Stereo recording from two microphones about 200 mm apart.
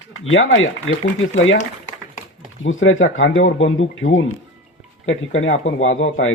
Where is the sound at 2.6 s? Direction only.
75° left (ahead or behind).